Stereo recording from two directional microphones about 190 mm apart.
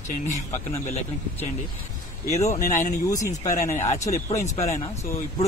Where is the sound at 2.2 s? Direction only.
15° left (ahead or behind).